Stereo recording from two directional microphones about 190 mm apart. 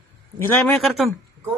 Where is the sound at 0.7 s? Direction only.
Centre (ahead or behind).